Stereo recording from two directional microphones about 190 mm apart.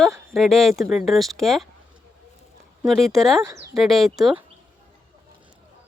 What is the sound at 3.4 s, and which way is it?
Speech, 15° right (ahead or behind).